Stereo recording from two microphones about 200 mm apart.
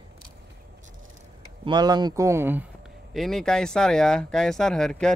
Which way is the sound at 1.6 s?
20° right (ahead or behind).